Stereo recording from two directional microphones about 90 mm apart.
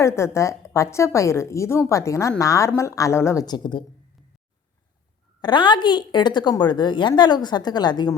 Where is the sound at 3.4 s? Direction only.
55° left (ahead or behind).